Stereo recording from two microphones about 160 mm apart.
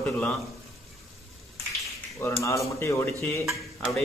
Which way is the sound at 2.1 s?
20° left (ahead or behind).